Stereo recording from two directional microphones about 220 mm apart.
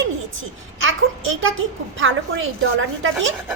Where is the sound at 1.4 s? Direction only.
65° right (ahead or behind).